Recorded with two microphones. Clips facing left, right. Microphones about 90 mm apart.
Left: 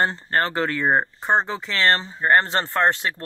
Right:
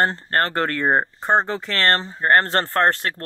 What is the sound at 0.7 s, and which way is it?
Speech, centre (ahead or behind).